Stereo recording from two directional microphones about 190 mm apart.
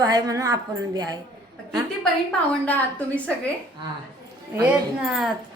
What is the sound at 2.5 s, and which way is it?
Speech, 5° left (ahead or behind).